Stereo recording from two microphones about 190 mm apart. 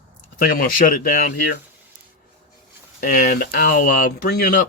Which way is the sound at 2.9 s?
50° left (ahead or behind).